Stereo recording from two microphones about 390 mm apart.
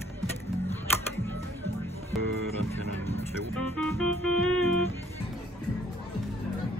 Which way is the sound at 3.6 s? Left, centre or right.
Centre.